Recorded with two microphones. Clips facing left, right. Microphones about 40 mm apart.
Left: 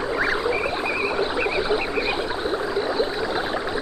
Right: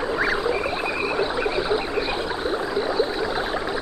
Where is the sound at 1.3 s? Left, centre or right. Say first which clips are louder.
Even; left.